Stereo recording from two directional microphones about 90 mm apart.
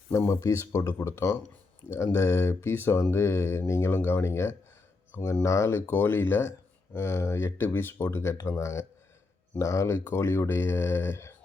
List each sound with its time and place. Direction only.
0.3 s speech: 35° left (ahead or behind)